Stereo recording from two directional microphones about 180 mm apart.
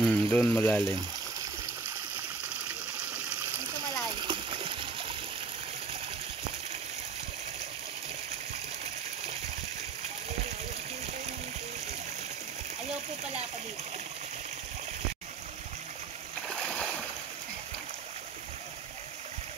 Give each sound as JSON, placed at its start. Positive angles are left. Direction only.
{"t": 0.0, "sound": "speech", "side_deg": 5}
{"t": 4.2, "sound": "splash", "side_deg": -30}
{"t": 16.6, "sound": "a sound", "side_deg": 5}